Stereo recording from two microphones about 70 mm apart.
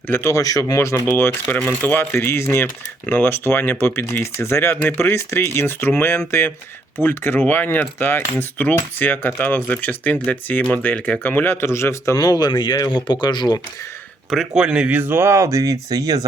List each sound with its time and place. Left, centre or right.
0.1 s speech: left
0.3 s speech: left
0.8 s speech: left
1.1 s speech: left
12.1 s speech: left
14.3 s speech: centre; by 15.2 s right
15.2 s speech: right